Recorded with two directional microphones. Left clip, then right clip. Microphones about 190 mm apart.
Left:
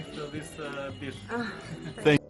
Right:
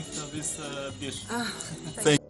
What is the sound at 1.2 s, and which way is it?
Speech, 70° right (ahead or behind).